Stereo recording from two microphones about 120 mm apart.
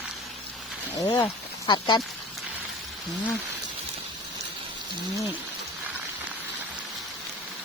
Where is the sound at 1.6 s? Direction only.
40° left (ahead or behind).